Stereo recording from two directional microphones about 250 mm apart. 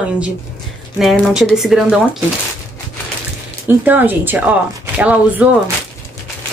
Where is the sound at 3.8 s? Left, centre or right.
Centre.